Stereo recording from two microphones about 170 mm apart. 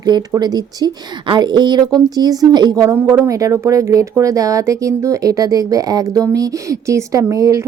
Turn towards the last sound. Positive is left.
turn(degrees=-20)  # may be behind; listen again after turning